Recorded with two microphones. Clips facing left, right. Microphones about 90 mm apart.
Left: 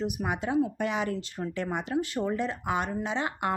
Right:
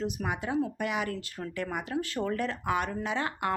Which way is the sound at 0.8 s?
25° left (ahead or behind).